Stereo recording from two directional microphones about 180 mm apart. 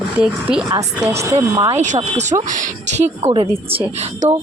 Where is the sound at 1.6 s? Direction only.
40° right (ahead or behind).